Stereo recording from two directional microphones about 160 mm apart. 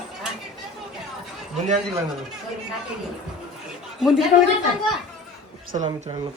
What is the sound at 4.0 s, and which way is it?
Speech, centre (ahead or behind).